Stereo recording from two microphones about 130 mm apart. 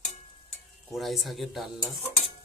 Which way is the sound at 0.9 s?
Centre (ahead or behind).